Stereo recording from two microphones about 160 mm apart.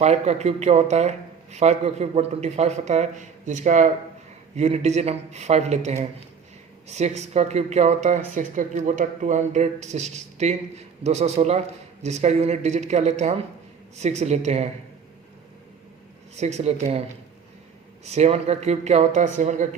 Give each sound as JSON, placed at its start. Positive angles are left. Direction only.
{"t": 0.0, "sound": "a man's voice", "side_deg": -45}
{"t": 16.3, "sound": "a man's voice", "side_deg": -45}
{"t": 18.0, "sound": "a man's voice", "side_deg": -45}